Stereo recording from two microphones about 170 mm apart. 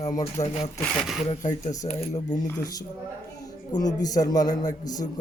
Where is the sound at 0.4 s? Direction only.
20° left (ahead or behind).